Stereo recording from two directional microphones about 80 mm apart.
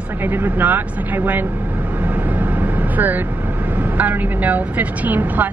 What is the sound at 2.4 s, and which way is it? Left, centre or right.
Vehicle, right.